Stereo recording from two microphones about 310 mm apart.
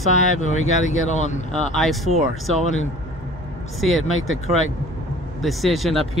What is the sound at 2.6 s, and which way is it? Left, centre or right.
Speech, left.